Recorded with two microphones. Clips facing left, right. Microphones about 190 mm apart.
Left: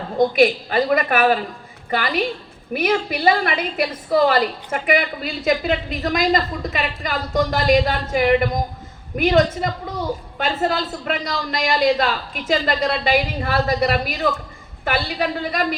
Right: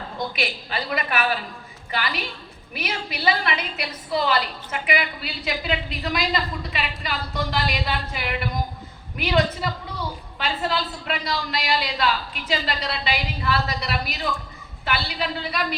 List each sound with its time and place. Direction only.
0.2 s a woman's voice: 50° left (ahead or behind)